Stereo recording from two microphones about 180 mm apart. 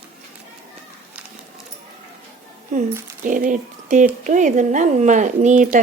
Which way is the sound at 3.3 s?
45° right (ahead or behind).